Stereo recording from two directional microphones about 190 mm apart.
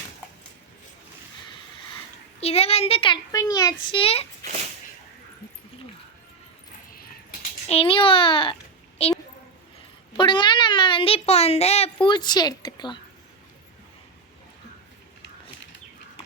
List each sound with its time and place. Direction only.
2.4 s a child's voice: 30° left (ahead or behind)
7.7 s a woman's voice: 30° left (ahead or behind)
10.2 s a child's voice: 25° left (ahead or behind)
12.0 s a woman's voice: 25° left (ahead or behind)